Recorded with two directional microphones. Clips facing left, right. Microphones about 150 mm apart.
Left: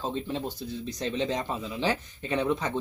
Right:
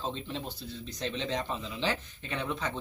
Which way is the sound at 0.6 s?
15° left (ahead or behind).